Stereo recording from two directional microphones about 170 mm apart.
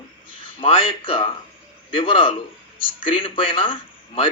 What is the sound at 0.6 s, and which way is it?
Speech, 30° left (ahead or behind).